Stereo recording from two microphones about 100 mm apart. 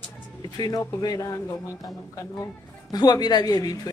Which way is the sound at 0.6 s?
40° left (ahead or behind).